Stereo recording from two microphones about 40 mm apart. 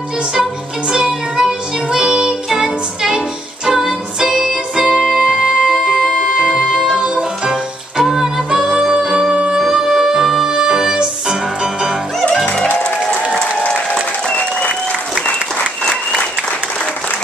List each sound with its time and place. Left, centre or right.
0.4 s music: centre
8.0 s music: centre
8.5 s music: centre